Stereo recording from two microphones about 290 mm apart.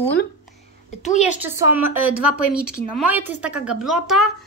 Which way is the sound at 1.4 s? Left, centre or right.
Centre.